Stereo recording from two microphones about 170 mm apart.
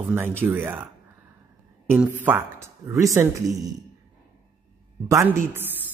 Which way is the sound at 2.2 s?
15° right (ahead or behind).